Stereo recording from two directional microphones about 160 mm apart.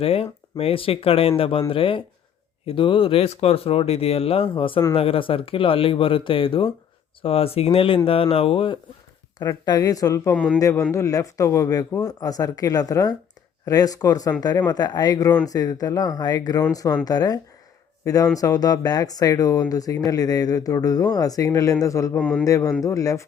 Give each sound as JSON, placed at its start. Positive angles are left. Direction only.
{"t": 0.0, "sound": "speech", "side_deg": 40}
{"t": 10.3, "sound": "a man's voice", "side_deg": 5}
{"t": 10.6, "sound": "speech", "side_deg": 20}
{"t": 22.2, "sound": "a man's voice", "side_deg": 5}
{"t": 22.4, "sound": "speech", "side_deg": 20}